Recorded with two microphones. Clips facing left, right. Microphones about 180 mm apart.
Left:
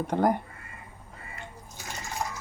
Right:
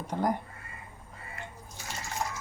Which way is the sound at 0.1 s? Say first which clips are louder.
Left 5 dB; 65° left (ahead or behind).